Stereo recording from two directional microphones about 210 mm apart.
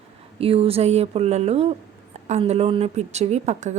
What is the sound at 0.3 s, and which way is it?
A woman's voice, 25° right (ahead or behind).